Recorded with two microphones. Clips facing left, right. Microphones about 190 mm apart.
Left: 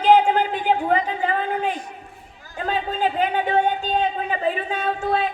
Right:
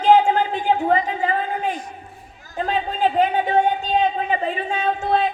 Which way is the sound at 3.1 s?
35° right (ahead or behind).